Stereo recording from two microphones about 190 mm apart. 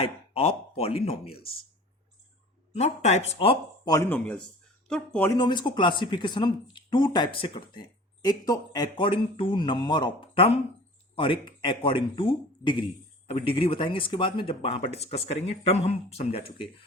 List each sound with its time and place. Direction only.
0.0 s chopping: 30° left (ahead or behind)
0.8 s speech: 30° left (ahead or behind)
2.7 s speech: 35° left (ahead or behind)
3.9 s speech: 10° left (ahead or behind)
5.3 s speech: 20° left (ahead or behind)